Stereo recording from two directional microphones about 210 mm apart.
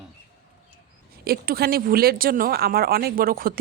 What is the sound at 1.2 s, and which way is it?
Speech, 45° right (ahead or behind).